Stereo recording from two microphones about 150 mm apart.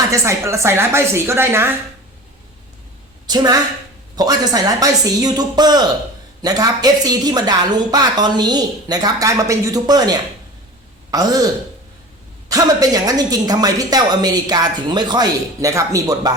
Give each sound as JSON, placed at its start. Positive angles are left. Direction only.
{"t": 0.1, "sound": "speech", "side_deg": -20}
{"t": 3.2, "sound": "speech", "side_deg": -25}
{"t": 12.5, "sound": "speech", "side_deg": -25}